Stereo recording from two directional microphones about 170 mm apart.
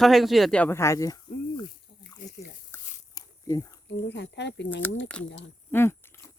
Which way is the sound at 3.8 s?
90° left.